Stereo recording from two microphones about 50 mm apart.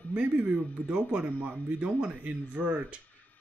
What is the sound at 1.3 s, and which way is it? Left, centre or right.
Speech, right.